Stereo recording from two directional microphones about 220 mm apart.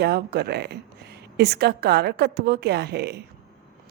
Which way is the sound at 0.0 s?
45° right (ahead or behind).